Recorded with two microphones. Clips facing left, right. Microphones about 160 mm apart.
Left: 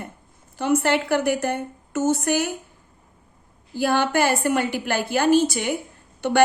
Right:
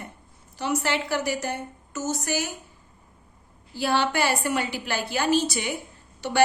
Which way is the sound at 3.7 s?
50° left (ahead or behind).